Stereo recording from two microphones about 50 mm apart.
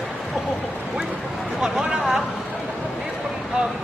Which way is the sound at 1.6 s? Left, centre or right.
Centre.